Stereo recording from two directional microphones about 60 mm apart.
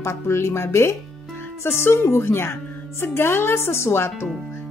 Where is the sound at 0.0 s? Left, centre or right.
Left.